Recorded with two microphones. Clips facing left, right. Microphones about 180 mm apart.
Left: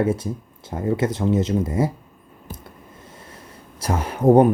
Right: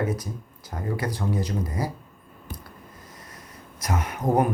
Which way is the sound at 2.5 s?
25° left (ahead or behind).